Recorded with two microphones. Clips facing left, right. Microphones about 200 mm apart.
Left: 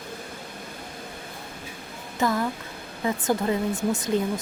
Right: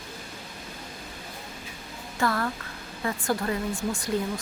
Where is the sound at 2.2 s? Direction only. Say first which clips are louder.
Left 2 dB; 15° left (ahead or behind).